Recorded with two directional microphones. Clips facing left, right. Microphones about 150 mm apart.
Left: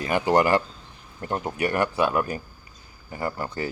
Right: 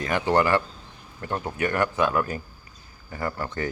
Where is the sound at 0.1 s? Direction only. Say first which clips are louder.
Left 2 dB; 15° left (ahead or behind).